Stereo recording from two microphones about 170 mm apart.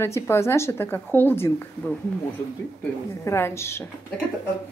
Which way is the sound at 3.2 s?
15° left (ahead or behind).